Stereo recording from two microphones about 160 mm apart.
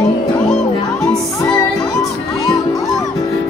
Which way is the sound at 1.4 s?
20° left (ahead or behind).